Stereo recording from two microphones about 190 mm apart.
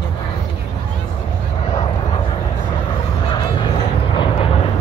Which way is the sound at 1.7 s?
25° left (ahead or behind).